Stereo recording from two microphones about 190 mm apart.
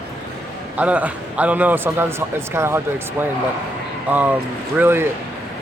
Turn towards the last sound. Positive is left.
turn(degrees=-10)  # may be behind; listen again after turning